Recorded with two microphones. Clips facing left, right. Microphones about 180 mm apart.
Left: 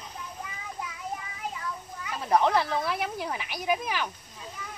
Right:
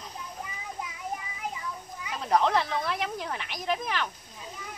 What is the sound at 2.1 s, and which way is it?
Speech, 5° left (ahead or behind).